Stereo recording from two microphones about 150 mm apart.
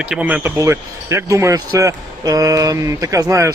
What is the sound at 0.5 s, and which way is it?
Speech, 20° right (ahead or behind).